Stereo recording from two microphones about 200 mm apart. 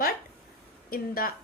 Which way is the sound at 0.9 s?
45° left (ahead or behind).